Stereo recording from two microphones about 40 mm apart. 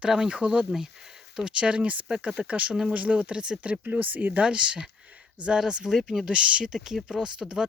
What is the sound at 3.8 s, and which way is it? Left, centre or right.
Speech, right.